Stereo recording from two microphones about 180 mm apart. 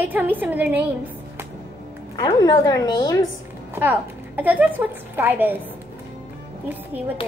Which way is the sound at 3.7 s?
10° right (ahead or behind).